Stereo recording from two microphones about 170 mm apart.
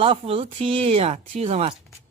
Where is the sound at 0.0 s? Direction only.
30° right (ahead or behind).